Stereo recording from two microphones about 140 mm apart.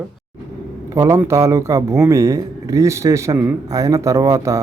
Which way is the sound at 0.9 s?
20° right (ahead or behind).